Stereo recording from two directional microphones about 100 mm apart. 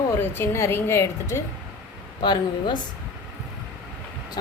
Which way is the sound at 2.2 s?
50° left (ahead or behind).